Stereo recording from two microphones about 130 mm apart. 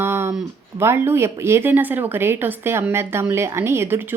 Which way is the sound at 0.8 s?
20° right (ahead or behind).